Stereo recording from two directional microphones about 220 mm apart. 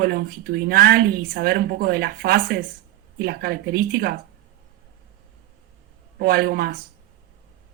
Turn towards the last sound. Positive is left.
turn(degrees=-45)  # may be behind; listen again after turning